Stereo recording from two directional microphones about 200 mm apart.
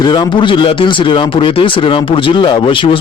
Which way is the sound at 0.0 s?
20° left (ahead or behind).